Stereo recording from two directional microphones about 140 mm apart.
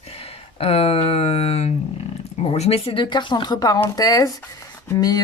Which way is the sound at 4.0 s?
25° left (ahead or behind).